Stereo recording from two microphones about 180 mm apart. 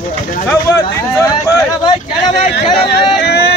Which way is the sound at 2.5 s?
65° left (ahead or behind).